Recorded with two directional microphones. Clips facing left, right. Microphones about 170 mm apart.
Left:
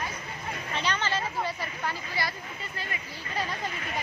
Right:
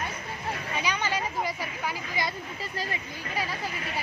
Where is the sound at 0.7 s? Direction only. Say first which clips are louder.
Left 1 dB; 10° right (ahead or behind).